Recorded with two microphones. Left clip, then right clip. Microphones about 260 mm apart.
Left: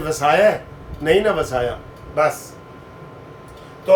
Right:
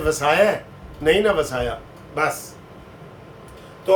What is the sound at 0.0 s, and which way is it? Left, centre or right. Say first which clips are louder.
A man's voice: left 2 dB; centre.